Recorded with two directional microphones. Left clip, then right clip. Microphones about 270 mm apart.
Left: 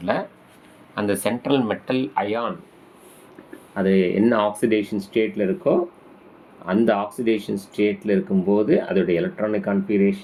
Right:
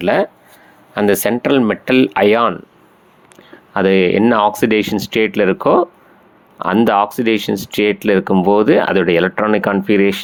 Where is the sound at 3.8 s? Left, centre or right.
Right.